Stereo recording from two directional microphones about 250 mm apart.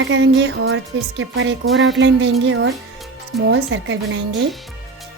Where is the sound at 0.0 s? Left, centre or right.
Right.